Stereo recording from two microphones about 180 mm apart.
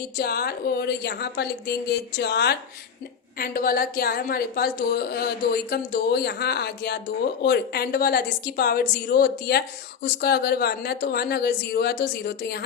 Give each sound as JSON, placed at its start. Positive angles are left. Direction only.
{"t": 0.2, "sound": "a woman's voice", "side_deg": 60}